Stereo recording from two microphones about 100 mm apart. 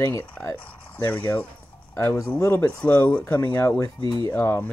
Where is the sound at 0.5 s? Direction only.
15° left (ahead or behind).